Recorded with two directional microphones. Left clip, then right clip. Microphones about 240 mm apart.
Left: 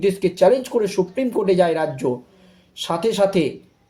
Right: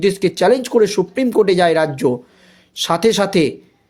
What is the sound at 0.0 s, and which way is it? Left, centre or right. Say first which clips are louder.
Speech: right 1 dB; right.